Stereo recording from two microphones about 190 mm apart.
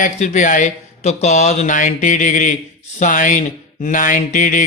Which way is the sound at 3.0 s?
45° left (ahead or behind).